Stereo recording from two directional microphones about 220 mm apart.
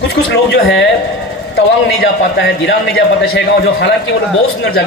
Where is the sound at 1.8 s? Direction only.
50° left (ahead or behind).